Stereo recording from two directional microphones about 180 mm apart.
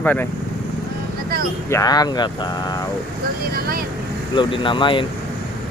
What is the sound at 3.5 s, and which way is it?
Vehicle, 55° right (ahead or behind).